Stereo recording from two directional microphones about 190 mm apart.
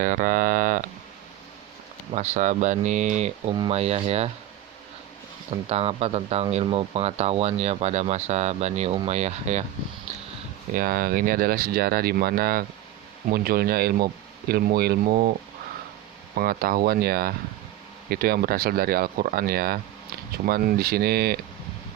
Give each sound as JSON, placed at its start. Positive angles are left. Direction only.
{"t": 0.0, "sound": "speech", "side_deg": -45}
{"t": 2.1, "sound": "speech", "side_deg": -40}
{"t": 5.6, "sound": "speech", "side_deg": -30}
{"t": 10.8, "sound": "speech", "side_deg": -50}
{"t": 16.3, "sound": "speech", "side_deg": -50}